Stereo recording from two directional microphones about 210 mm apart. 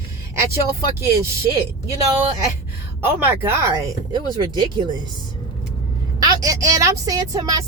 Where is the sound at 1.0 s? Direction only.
15° right (ahead or behind).